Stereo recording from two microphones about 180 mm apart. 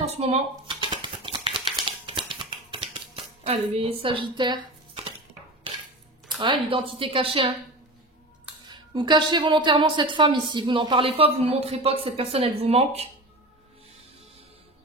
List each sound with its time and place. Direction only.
0.0 s a sound: 35° right (ahead or behind)
3.4 s speech: 35° right (ahead or behind)
6.4 s speech: 30° right (ahead or behind)
8.6 s a woman's voice: 25° right (ahead or behind)